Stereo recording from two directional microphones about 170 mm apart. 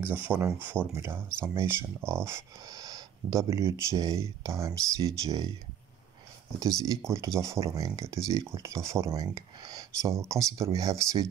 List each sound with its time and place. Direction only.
0.0 s speech: 10° right (ahead or behind)
6.8 s speech: 20° right (ahead or behind)